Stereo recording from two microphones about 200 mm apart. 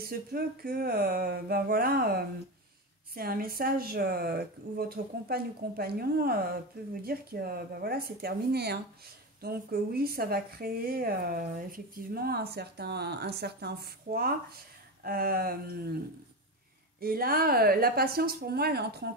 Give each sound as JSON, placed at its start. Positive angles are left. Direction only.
{"t": 0.0, "sound": "speech", "side_deg": -50}
{"t": 17.0, "sound": "speech", "side_deg": -50}